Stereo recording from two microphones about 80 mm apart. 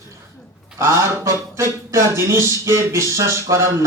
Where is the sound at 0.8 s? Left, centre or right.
Right.